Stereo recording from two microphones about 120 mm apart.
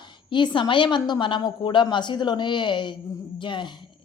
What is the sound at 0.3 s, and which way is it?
Speech, 40° left (ahead or behind).